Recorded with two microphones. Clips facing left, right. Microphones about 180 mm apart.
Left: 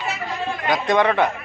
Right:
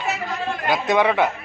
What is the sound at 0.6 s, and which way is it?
Speech, 5° right (ahead or behind).